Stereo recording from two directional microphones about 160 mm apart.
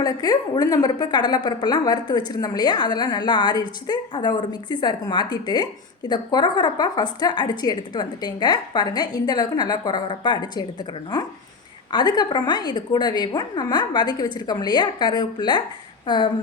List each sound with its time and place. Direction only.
0.0 s a woman's voice: 25° left (ahead or behind)